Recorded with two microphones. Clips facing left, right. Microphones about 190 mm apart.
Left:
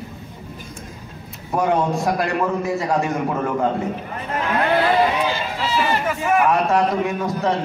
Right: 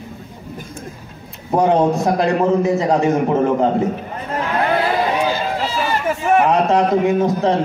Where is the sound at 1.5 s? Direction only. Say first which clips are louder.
Right 5 dB; 20° right (ahead or behind).